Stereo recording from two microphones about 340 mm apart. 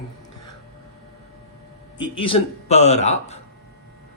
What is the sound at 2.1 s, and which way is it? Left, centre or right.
A man's voice, centre.